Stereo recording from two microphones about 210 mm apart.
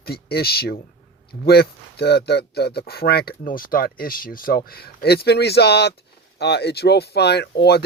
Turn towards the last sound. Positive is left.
turn(degrees=50)  # may be behind; listen again after turning